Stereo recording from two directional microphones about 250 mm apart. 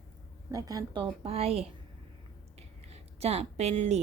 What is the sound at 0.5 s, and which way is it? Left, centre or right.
A woman's voice, centre.